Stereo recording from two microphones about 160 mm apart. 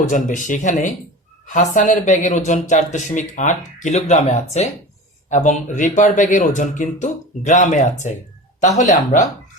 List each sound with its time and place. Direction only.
0.1 s speech: 55° left (ahead or behind)